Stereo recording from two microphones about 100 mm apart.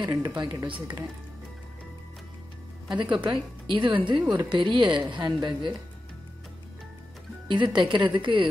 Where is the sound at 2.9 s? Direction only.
50° right (ahead or behind).